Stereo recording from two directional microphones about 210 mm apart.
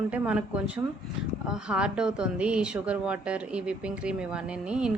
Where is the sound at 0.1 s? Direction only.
5° right (ahead or behind).